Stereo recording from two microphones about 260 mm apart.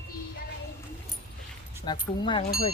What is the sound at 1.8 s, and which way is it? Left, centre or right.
Speech, centre.